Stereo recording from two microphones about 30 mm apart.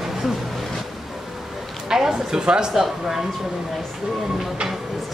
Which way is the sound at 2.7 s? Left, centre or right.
Centre.